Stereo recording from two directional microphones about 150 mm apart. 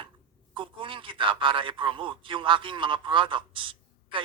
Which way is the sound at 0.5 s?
35° right (ahead or behind).